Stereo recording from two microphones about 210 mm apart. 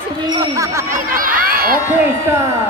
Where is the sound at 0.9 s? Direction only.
40° right (ahead or behind).